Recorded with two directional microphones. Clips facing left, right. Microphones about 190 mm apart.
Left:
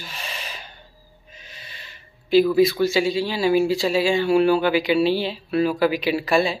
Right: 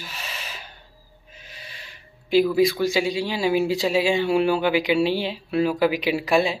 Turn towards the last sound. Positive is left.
turn(degrees=-15)  # may be behind; listen again after turning